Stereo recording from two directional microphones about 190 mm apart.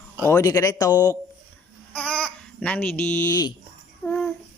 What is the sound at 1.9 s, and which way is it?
Babbling, 5° left (ahead or behind).